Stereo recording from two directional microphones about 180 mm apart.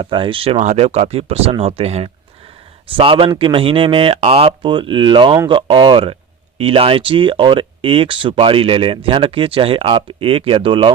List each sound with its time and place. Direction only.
0.0 s speech: 25° right (ahead or behind)